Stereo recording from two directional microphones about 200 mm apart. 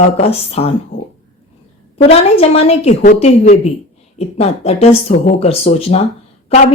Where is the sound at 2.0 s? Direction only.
30° left (ahead or behind).